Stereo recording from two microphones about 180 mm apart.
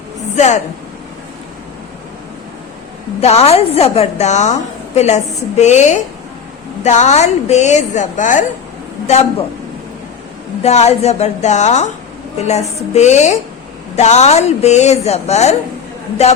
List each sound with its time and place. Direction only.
0.3 s a woman's voice: 40° left (ahead or behind)
3.2 s a woman's voice: 35° left (ahead or behind)
10.6 s a woman's voice: 35° left (ahead or behind)